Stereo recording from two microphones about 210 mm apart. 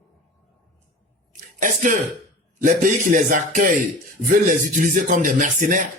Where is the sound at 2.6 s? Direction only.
40° right (ahead or behind).